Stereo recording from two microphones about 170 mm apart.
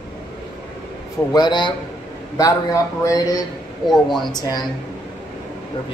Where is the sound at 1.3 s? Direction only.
25° left (ahead or behind).